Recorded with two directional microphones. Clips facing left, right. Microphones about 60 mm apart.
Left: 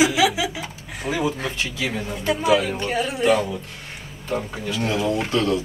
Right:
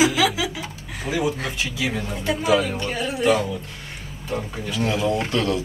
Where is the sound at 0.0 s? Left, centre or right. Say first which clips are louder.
Left 1 dB; centre.